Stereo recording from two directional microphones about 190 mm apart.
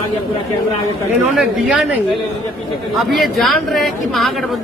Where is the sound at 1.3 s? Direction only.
5° right (ahead or behind).